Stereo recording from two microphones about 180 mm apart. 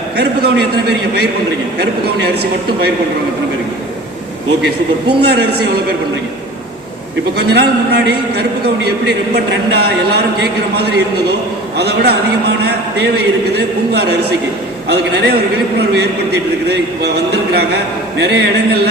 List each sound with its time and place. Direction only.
0.2 s a man's voice: 65° right (ahead or behind)
1.8 s a man's voice: 65° right (ahead or behind)
5.0 s a man's voice: 65° right (ahead or behind)
7.3 s a man's voice: 65° right (ahead or behind)
18.2 s a man's voice: 65° right (ahead or behind)